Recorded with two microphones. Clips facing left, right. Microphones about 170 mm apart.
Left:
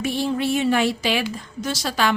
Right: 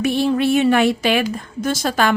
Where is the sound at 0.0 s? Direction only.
65° right (ahead or behind).